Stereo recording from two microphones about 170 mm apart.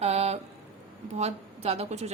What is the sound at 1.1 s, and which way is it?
Speech, 40° right (ahead or behind).